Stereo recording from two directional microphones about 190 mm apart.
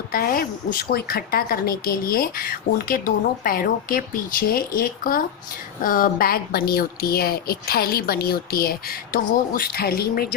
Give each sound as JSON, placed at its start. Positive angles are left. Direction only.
{"t": 0.1, "sound": "a woman's voice", "side_deg": 50}